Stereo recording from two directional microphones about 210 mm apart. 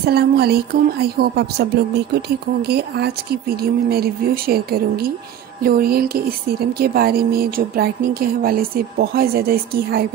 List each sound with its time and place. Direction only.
0.0 s speech: 50° right (ahead or behind)